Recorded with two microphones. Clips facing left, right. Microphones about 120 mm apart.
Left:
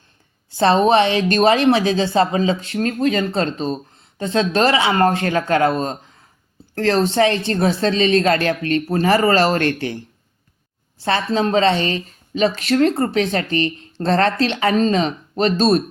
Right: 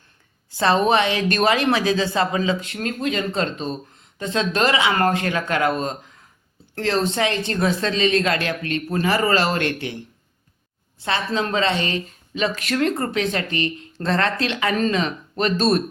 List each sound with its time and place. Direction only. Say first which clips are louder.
0.5 s speech: left 4 dB; 30° left (ahead or behind)
10.9 s speech: left 4 dB; 35° left (ahead or behind)